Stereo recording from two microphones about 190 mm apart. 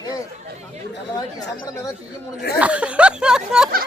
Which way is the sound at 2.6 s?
5° right (ahead or behind).